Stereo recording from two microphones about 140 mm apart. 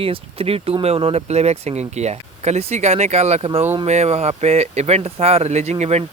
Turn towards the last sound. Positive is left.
turn(degrees=-50)  # may be behind; listen again after turning